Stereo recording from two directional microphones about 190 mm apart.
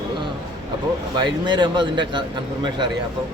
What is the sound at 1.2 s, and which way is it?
A man's voice, 25° right (ahead or behind).